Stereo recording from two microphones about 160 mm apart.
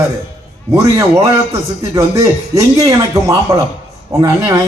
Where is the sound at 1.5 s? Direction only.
20° right (ahead or behind).